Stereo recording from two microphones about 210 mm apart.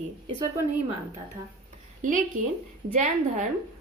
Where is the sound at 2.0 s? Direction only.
40° right (ahead or behind).